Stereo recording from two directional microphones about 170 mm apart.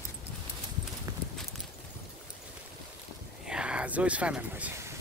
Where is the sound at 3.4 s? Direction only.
5° right (ahead or behind).